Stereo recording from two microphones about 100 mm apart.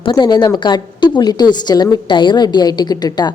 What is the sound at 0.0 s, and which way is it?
A woman's voice, 50° left (ahead or behind).